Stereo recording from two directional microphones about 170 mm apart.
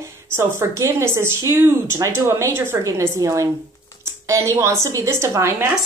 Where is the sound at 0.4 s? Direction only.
15° right (ahead or behind).